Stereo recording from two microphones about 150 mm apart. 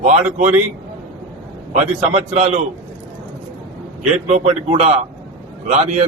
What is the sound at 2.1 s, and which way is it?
Speech, 45° right (ahead or behind).